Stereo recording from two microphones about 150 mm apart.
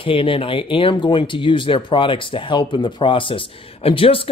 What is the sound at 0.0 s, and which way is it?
Speech, 35° left (ahead or behind).